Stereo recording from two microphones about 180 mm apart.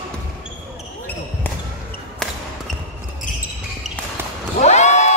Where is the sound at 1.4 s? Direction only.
10° left (ahead or behind).